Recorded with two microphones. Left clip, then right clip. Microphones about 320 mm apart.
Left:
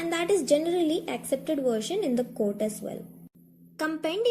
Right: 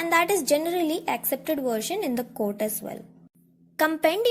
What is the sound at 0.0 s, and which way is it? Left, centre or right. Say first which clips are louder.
A woman's voice: right 4 dB; right.